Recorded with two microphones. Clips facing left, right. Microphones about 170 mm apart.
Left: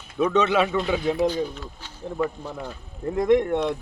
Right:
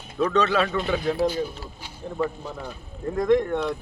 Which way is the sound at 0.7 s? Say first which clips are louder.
Left 1 dB; 5° right (ahead or behind).